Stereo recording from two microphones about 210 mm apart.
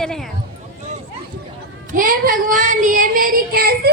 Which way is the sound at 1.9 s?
40° right (ahead or behind).